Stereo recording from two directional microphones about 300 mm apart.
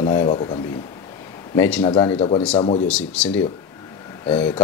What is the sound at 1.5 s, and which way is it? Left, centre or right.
Speech, centre.